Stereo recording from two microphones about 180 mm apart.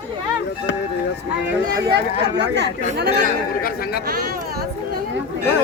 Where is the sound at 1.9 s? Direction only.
70° right (ahead or behind).